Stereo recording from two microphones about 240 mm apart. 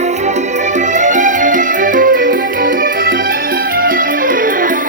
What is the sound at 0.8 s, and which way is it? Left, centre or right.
Music, right.